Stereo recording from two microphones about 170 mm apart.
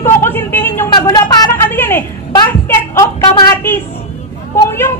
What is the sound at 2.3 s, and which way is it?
Speech, 15° left (ahead or behind).